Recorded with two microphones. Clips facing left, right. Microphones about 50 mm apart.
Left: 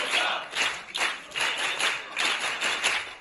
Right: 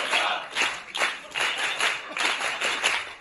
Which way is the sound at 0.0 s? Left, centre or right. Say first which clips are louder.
Right 2 dB; right.